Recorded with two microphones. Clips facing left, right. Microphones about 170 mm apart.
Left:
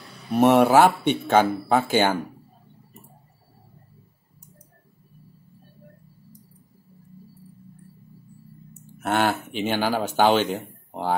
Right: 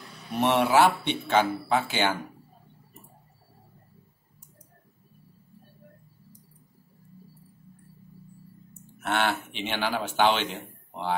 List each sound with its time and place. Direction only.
0.3 s speech: 45° left (ahead or behind)
9.0 s speech: 40° left (ahead or behind)